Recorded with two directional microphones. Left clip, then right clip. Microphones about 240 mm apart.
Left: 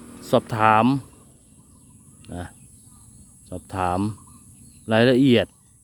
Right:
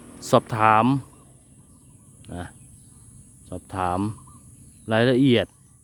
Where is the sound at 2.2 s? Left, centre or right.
Centre.